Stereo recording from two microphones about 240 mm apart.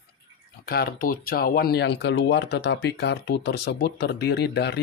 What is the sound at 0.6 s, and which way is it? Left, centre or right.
Speech, left.